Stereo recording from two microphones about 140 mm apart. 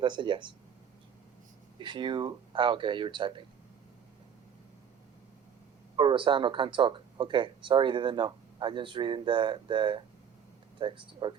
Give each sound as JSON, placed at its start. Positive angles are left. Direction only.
{"t": 0.0, "sound": "speech", "side_deg": -35}
{"t": 1.8, "sound": "speech", "side_deg": -35}
{"t": 6.0, "sound": "speech", "side_deg": -35}